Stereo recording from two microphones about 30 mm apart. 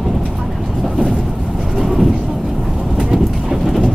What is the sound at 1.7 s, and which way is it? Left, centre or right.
Vehicle, centre.